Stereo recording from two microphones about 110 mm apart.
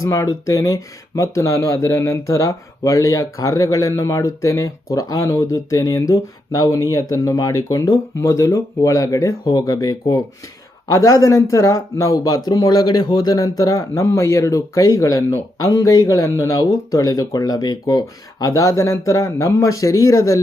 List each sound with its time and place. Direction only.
0.0 s speech: 30° left (ahead or behind)